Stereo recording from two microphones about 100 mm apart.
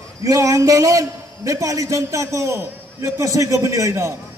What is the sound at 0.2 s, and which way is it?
A man's voice, 35° right (ahead or behind).